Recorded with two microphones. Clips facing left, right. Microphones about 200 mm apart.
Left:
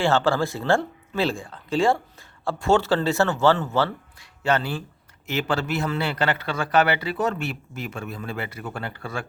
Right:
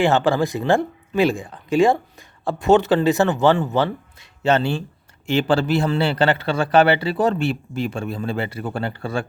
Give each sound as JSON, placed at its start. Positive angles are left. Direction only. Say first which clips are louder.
{"t": 0.0, "sound": "a man's voice", "louder": "right 3 dB", "side_deg": -15}